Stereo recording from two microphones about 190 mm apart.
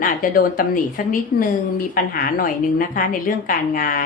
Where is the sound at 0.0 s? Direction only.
50° left (ahead or behind).